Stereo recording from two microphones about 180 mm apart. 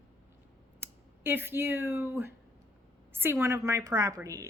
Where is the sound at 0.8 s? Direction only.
10° right (ahead or behind).